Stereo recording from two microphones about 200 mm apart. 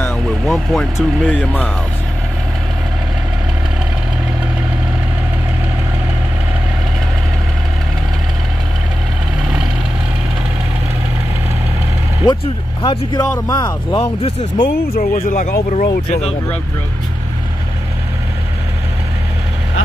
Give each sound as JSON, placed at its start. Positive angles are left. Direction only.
{"t": 0.0, "sound": "speech", "side_deg": 5}
{"t": 12.2, "sound": "speech", "side_deg": 20}
{"t": 14.6, "sound": "speech", "side_deg": 45}